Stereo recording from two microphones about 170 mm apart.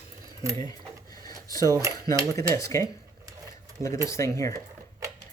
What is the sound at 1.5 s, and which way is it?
Speech, 20° left (ahead or behind).